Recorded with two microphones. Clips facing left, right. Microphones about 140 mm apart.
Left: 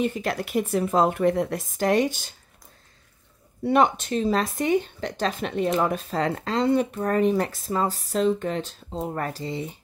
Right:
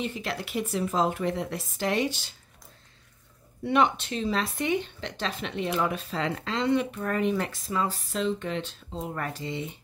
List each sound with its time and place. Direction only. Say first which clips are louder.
0.0 s speech: left 6 dB; 45° left (ahead or behind)
3.6 s speech: left 4 dB; 40° left (ahead or behind)